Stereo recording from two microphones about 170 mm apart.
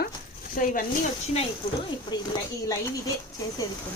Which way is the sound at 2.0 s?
20° left (ahead or behind).